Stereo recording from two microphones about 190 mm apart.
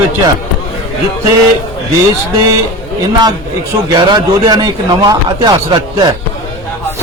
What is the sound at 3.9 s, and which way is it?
Speech, 20° right (ahead or behind).